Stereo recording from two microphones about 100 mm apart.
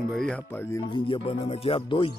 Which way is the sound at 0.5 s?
20° left (ahead or behind).